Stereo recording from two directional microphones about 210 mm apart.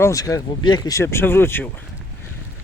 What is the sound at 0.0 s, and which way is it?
Speech, 15° left (ahead or behind).